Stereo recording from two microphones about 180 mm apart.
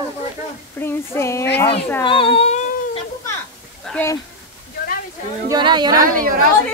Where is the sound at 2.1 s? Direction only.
30° left (ahead or behind).